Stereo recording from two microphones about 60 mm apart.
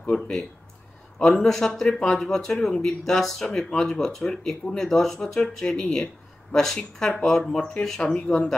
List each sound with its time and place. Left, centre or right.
0.1 s speech: centre
1.2 s speech: centre